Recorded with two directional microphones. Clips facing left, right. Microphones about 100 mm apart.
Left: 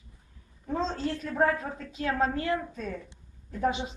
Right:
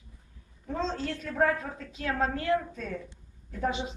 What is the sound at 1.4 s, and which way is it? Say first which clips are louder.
A man's voice: even; 20° left (ahead or behind).